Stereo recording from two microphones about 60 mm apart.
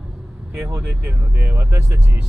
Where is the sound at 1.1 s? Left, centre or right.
Right.